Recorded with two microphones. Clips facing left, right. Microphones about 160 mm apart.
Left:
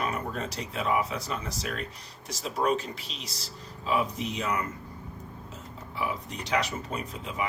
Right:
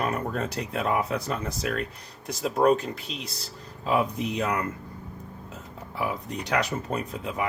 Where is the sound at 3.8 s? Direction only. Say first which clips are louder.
Right 3 dB; 50° right (ahead or behind).